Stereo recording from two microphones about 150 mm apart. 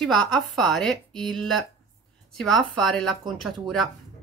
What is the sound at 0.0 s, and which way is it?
Speech, 5° left (ahead or behind).